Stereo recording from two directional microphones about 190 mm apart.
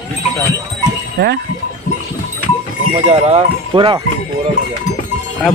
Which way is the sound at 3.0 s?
35° right (ahead or behind).